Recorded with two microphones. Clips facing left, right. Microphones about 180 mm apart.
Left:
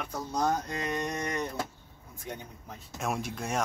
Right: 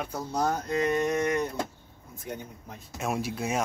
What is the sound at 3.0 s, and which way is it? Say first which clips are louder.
Speech: right 3 dB; 5° right (ahead or behind).